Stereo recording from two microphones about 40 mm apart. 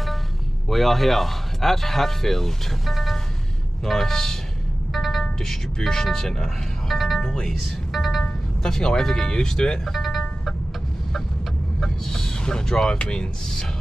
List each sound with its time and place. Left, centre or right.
0.7 s speech: centre
4.9 s music: centre
5.4 s speech: centre
7.5 s music: centre
8.6 s speech: centre
9.9 s music: centre
11.8 s vehicle: centre
12.9 s speech: left